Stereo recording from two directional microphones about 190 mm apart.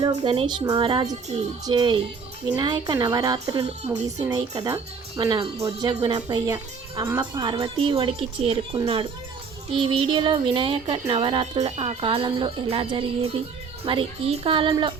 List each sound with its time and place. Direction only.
0.3 s music: 25° right (ahead or behind)